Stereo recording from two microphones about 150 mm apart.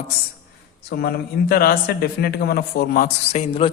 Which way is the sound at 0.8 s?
90° left.